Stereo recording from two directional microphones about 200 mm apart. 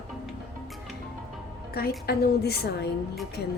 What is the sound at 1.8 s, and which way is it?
Speech, 50° left (ahead or behind).